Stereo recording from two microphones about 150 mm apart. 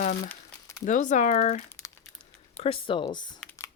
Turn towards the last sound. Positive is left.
turn(degrees=35)  # may be behind; listen again after turning